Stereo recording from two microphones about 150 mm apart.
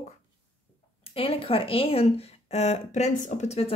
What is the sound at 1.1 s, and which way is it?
Speech, 40° left (ahead or behind).